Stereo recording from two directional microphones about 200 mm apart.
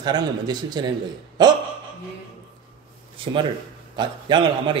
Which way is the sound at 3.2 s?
25° right (ahead or behind).